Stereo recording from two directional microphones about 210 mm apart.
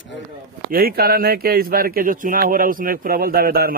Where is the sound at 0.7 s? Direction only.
45° right (ahead or behind).